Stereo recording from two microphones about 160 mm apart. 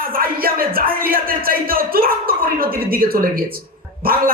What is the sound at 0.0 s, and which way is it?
Speech, 65° right (ahead or behind).